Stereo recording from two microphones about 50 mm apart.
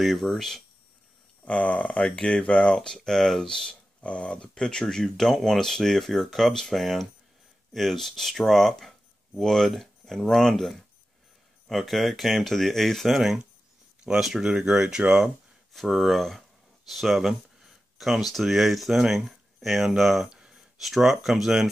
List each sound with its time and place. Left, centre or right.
0.0 s speech: centre
1.4 s speech: left; by 15.0 s centre
15.7 s speech: centre
20.0 s a sound: centre
20.8 s speech: centre